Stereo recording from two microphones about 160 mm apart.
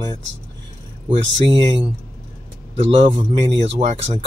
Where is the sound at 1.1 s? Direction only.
35° right (ahead or behind).